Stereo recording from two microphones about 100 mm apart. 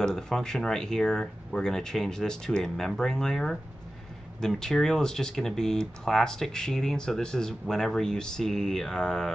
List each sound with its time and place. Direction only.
0.0 s speech: 5° left (ahead or behind)